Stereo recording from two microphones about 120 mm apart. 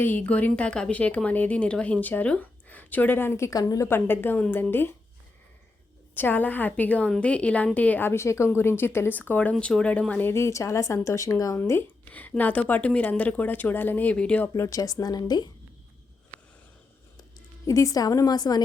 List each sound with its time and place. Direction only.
0.0 s a woman's voice: 15° left (ahead or behind)
3.8 s a woman's voice: 20° left (ahead or behind)
6.1 s a woman's voice: 15° left (ahead or behind)
14.5 s a woman's voice: 25° left (ahead or behind)
17.2 s speech: 30° left (ahead or behind)